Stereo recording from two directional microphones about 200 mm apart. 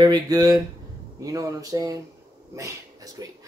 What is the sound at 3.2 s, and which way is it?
Speech, 20° right (ahead or behind).